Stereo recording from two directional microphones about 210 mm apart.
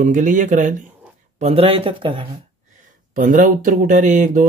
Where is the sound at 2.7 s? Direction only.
40° right (ahead or behind).